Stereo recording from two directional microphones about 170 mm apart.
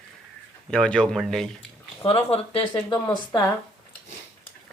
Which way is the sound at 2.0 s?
35° left (ahead or behind).